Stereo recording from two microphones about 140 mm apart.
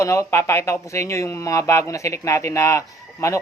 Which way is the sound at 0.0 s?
20° left (ahead or behind).